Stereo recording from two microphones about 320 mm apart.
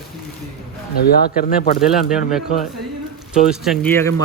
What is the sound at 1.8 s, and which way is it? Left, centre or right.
Speech, centre.